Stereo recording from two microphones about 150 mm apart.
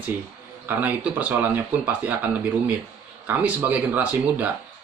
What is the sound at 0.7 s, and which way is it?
A man's voice, 10° right (ahead or behind).